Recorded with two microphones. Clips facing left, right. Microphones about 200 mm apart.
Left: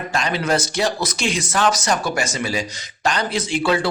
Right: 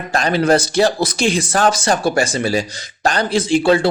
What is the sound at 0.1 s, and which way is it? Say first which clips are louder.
Speech: right 7 dB; 35° right (ahead or behind).